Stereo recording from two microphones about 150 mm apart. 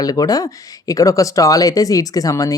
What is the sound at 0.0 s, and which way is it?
Speech, 25° left (ahead or behind).